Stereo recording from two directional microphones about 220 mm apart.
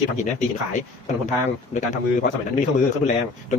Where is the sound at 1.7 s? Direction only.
35° left (ahead or behind).